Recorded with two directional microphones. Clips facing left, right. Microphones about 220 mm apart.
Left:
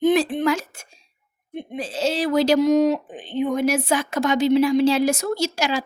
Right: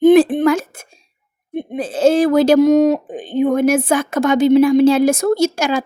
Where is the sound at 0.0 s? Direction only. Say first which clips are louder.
Right 9 dB; 50° right (ahead or behind).